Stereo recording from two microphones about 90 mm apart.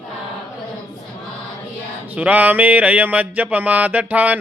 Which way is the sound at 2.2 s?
15° right (ahead or behind).